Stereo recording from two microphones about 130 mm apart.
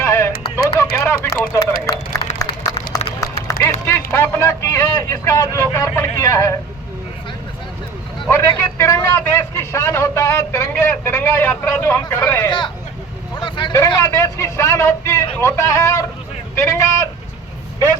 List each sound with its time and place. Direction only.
0.0 s radio: 20° left (ahead or behind)
1.9 s a sound: 25° left (ahead or behind)
3.2 s speech: 25° left (ahead or behind)
8.3 s a man's voice: 20° left (ahead or behind)
12.5 s speech: 35° left (ahead or behind)
13.7 s a man's voice: 25° left (ahead or behind)